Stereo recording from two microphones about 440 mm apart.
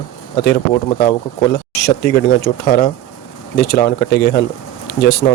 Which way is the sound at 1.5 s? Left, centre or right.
Left.